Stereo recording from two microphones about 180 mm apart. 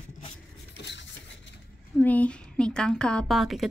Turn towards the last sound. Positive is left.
turn(degrees=0)  # may be behind; listen again after turning